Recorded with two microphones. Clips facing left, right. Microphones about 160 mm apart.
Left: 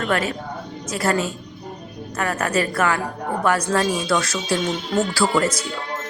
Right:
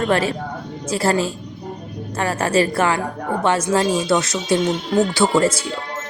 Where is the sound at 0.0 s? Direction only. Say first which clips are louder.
Right 4 dB; 30° right (ahead or behind).